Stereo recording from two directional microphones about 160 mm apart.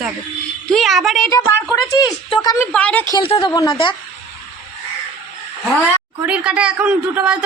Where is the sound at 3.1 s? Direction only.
30° left (ahead or behind).